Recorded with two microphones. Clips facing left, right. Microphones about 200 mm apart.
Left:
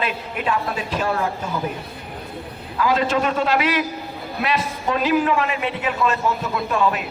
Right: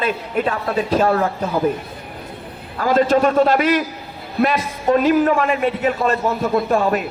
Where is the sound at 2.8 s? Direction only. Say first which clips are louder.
Right 5 dB; 45° right (ahead or behind).